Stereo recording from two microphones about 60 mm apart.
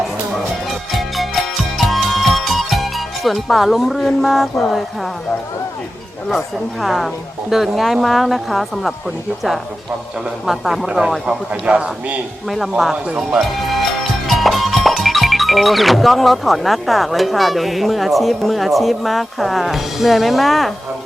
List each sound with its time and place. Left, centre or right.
0.9 s music: centre
6.8 s speech: centre
10.4 s a man's voice: centre; by 12.2 s right
12.7 s speech: centre
14.3 s speech: centre